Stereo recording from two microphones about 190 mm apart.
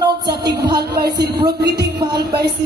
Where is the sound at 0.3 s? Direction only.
20° right (ahead or behind).